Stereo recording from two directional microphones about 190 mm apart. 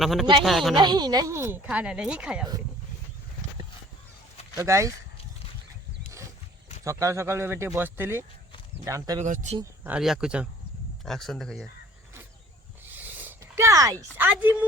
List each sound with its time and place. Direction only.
0.0 s speech: centre (ahead or behind)
0.8 s speech: 20° right (ahead or behind); by 2.5 s 5° right (ahead or behind)
4.5 s speech: 15° right (ahead or behind)
6.8 s speech: 15° right (ahead or behind)
9.2 s speech: 40° right (ahead or behind)
9.8 s speech: 5° right (ahead or behind)
12.8 s a sound: 10° right (ahead or behind)
14.2 s speech: 10° right (ahead or behind)